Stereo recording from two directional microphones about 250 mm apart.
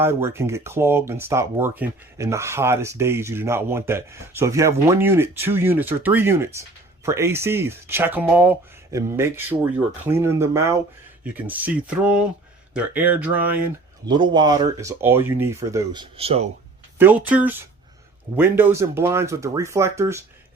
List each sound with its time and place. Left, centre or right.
0.0 s speech: centre
14.1 s speech: centre
17.0 s speech: centre